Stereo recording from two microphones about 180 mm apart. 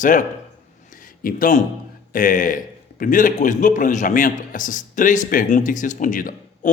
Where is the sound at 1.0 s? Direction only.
50° left (ahead or behind).